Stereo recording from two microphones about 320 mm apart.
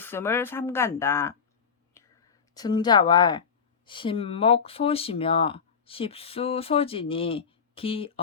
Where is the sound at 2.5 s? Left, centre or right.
Centre.